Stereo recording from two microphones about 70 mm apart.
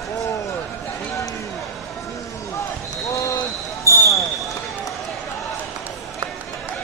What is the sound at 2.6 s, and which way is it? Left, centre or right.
Basketball bounce, left.